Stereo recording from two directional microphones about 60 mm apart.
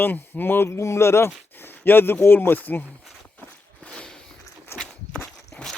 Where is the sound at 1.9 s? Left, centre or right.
Left.